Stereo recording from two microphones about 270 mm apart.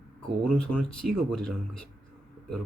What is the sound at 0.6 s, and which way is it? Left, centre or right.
Speech, centre.